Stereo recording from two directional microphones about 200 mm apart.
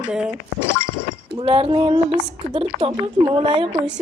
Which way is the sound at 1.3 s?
30° right (ahead or behind).